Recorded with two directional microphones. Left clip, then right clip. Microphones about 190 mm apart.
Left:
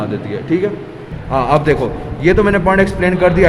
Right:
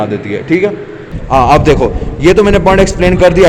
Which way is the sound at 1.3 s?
30° right (ahead or behind).